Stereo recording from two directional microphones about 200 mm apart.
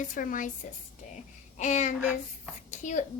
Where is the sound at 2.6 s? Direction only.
35° left (ahead or behind).